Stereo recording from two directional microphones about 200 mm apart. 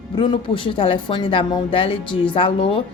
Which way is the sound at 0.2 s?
25° left (ahead or behind).